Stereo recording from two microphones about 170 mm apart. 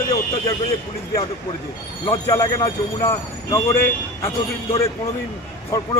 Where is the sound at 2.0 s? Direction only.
20° left (ahead or behind).